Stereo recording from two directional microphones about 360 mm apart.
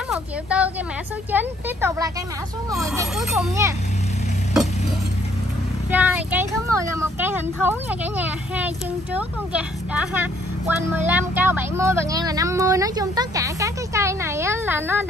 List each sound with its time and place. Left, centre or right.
0.1 s a sound: centre
1.3 s speech: centre
5.9 s speech: centre